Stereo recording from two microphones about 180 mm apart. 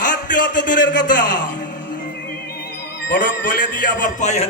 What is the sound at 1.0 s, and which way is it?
Speech, 45° left (ahead or behind).